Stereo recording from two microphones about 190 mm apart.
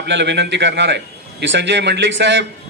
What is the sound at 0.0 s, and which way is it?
A man's voice, 65° right (ahead or behind).